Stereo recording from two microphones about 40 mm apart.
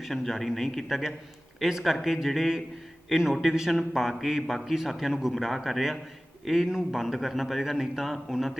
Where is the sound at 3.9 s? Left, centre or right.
Centre.